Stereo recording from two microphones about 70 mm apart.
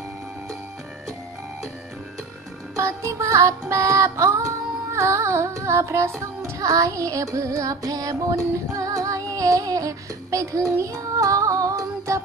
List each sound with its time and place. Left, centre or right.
2.7 s music: right